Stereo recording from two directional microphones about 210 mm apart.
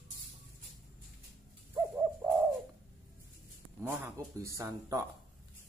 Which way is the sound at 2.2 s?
15° right (ahead or behind).